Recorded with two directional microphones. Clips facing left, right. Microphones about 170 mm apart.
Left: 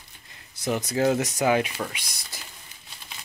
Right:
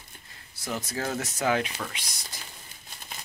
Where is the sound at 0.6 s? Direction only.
15° left (ahead or behind).